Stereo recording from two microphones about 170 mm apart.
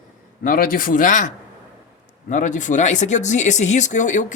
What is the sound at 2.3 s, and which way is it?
Speech, 45° left (ahead or behind).